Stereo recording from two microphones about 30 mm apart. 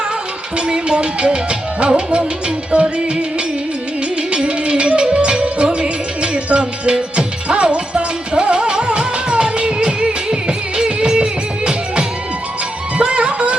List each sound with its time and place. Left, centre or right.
0.7 s music: right
4.4 s music: right